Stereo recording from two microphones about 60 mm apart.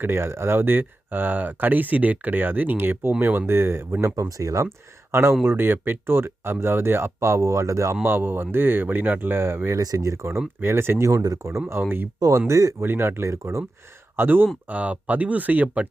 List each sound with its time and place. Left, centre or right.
0.0 s speech: right
4.1 s speech: right
5.4 s speech: right
8.0 s speech: right
9.7 s speech: right
11.2 s speech: right
11.8 s speech: right
12.5 s speech: right
12.8 s speech: right
13.3 s speech: right
14.2 s speech: right
14.7 s speech: right